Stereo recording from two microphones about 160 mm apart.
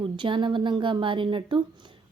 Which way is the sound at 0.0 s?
30° right (ahead or behind).